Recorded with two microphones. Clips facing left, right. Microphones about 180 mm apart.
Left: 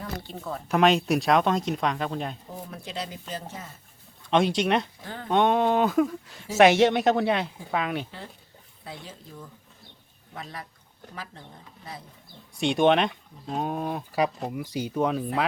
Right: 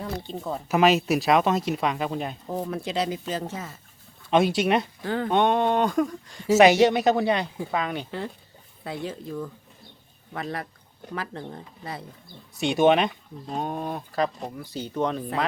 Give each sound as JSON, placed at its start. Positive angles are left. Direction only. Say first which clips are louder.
{"t": 0.0, "sound": "speech", "louder": "right 4 dB", "side_deg": -20}
{"t": 0.7, "sound": "speech", "louder": "right 1 dB", "side_deg": -5}
{"t": 2.5, "sound": "speech", "louder": "right 9 dB", "side_deg": -90}
{"t": 4.3, "sound": "speech", "louder": "right 2 dB", "side_deg": -5}
{"t": 5.0, "sound": "speech", "louder": "right 11 dB", "side_deg": -90}
{"t": 5.3, "sound": "speech", "louder": "left 1 dB", "side_deg": 0}
{"t": 8.8, "sound": "speech", "louder": "right 9 dB", "side_deg": -65}
{"t": 10.3, "sound": "speech", "louder": "right 7 dB", "side_deg": -65}
{"t": 12.5, "sound": "speech", "louder": "right 1 dB", "side_deg": -5}